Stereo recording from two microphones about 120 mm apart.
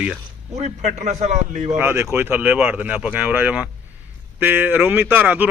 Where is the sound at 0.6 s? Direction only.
85° right.